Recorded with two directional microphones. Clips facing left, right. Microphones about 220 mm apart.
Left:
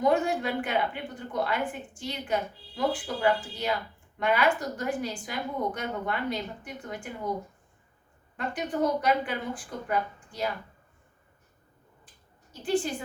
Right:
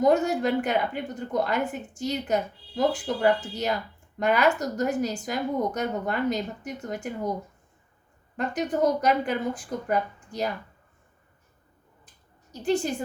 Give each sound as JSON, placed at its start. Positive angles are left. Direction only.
{"t": 0.0, "sound": "a woman's voice", "side_deg": -40}
{"t": 8.4, "sound": "a woman's voice", "side_deg": -45}
{"t": 12.6, "sound": "a woman's voice", "side_deg": -45}